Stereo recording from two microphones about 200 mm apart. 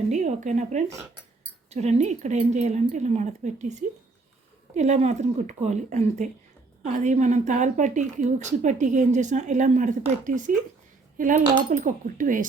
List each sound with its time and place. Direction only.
0.1 s speech: 35° right (ahead or behind)